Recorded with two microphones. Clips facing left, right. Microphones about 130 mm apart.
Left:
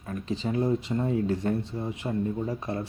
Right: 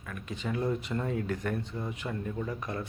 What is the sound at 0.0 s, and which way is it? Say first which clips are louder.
Speech: left 6 dB; 30° left (ahead or behind).